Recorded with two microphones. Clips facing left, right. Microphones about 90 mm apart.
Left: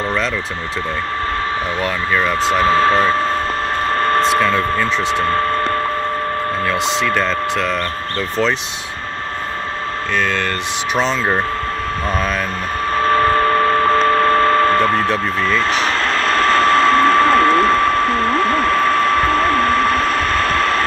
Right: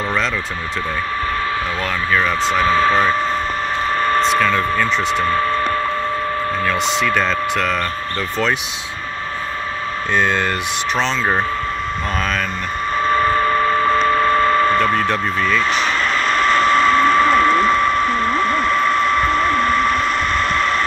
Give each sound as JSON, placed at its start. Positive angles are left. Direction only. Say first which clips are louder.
{"t": 2.1, "sound": "speech", "louder": "left 1 dB", "side_deg": 0}
{"t": 2.6, "sound": "speech", "louder": "left 1 dB", "side_deg": 40}
{"t": 3.9, "sound": "a sound", "louder": "left 1 dB", "side_deg": 40}
{"t": 4.4, "sound": "speech", "louder": "left 1 dB", "side_deg": 5}
{"t": 5.1, "sound": "speech", "louder": "left 1 dB", "side_deg": 45}
{"t": 6.6, "sound": "speech", "louder": "even", "side_deg": 0}
{"t": 10.1, "sound": "speech", "louder": "right 2 dB", "side_deg": -20}
{"t": 11.0, "sound": "speech", "louder": "left 2 dB", "side_deg": 5}
{"t": 12.9, "sound": "a sound", "louder": "left 2 dB", "side_deg": 50}